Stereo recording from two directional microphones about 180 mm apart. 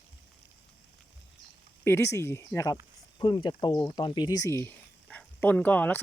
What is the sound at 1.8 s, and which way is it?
Speech, 15° left (ahead or behind).